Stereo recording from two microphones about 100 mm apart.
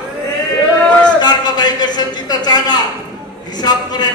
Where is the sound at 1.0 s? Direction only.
45° left (ahead or behind).